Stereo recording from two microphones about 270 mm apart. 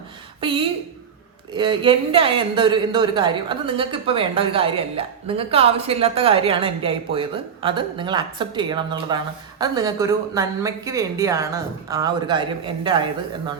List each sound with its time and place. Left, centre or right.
1.5 s a woman's voice: centre